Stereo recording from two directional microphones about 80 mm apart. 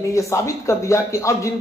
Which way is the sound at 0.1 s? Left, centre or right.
Left.